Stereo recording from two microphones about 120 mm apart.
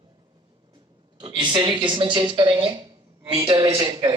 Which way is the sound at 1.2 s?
40° right (ahead or behind).